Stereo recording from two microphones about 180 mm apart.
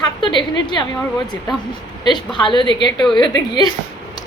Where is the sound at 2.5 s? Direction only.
25° left (ahead or behind).